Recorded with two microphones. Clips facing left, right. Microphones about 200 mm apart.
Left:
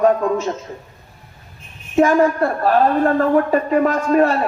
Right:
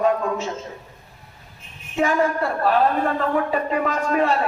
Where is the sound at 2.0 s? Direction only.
45° left (ahead or behind).